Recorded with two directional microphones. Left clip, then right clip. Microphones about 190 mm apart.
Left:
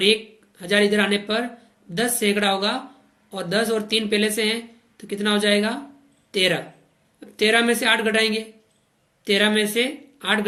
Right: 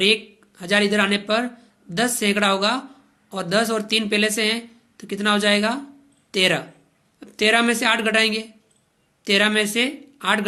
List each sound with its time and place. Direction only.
0.0 s speech: 40° right (ahead or behind)